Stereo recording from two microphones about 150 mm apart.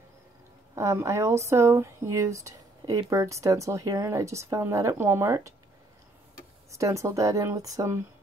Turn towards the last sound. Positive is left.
turn(degrees=-20)  # may be behind; listen again after turning